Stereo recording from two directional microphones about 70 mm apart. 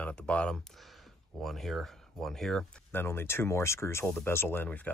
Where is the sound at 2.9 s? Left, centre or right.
Left.